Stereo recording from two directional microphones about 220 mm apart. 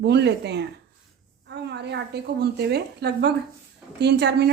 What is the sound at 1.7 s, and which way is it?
A woman's voice, 50° right (ahead or behind).